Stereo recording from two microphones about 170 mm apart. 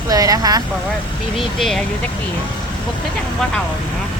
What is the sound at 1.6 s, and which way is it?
Speech, centre (ahead or behind).